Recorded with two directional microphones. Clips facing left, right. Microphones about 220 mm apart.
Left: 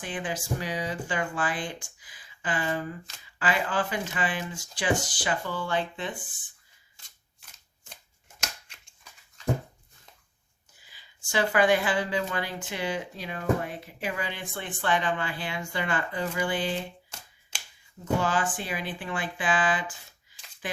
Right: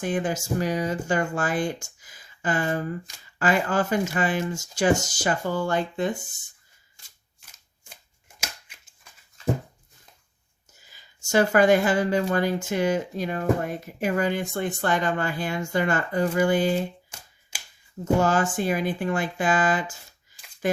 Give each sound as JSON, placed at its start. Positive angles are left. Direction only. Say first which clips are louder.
{"t": 0.0, "sound": "speech", "louder": "right 7 dB", "side_deg": -45}
{"t": 8.4, "sound": "scissors", "louder": "even", "side_deg": -5}
{"t": 10.8, "sound": "speech", "louder": "right 2 dB", "side_deg": -45}
{"t": 17.5, "sound": "finger snapping", "louder": "even", "side_deg": -5}
{"t": 18.0, "sound": "speech", "louder": "right 5 dB", "side_deg": -45}